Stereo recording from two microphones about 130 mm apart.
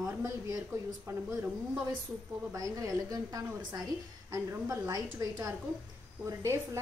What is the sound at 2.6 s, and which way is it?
Speech, 25° right (ahead or behind).